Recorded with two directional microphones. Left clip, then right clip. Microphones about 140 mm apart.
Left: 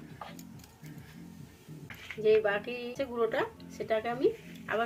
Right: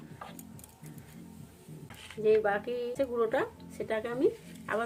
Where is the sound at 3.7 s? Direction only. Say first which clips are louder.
Left 2 dB; 35° right (ahead or behind).